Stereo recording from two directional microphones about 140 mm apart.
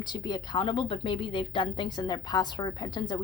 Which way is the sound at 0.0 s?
30° left (ahead or behind).